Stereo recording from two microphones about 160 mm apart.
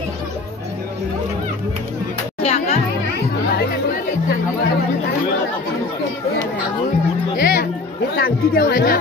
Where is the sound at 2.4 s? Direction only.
40° left (ahead or behind).